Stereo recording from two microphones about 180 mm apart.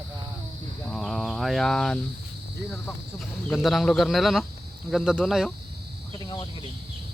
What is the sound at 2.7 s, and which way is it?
Speech, 5° left (ahead or behind).